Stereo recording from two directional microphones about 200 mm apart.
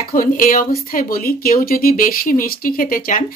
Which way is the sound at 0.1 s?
45° left (ahead or behind).